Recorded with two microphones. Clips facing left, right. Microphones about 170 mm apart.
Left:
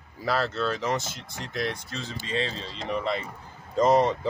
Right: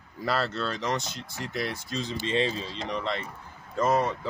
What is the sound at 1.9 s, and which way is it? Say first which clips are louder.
Speech: right 3 dB; 20° right (ahead or behind).